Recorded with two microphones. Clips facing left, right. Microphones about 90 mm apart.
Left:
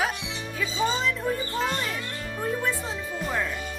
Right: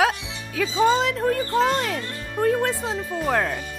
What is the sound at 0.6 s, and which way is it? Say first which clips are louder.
Speech: right 8 dB; 80° right.